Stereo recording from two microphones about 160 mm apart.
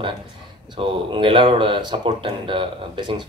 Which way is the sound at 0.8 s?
30° right (ahead or behind).